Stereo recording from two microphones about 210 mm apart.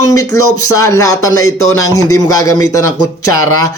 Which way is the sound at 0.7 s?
15° left (ahead or behind).